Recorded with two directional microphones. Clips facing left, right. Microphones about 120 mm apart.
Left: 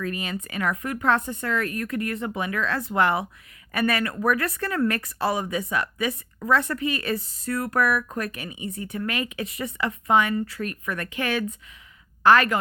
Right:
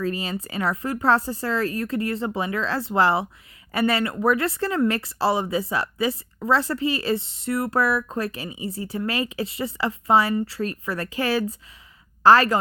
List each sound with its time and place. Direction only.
0.0 s a woman's voice: 30° right (ahead or behind)